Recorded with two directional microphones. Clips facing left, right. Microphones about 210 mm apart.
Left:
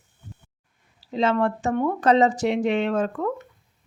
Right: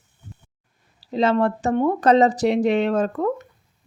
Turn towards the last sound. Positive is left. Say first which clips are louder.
# right 3 dB
turn(degrees=-40)  # may be behind; listen again after turning